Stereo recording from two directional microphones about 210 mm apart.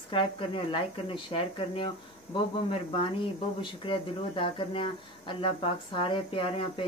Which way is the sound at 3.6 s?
25° left (ahead or behind).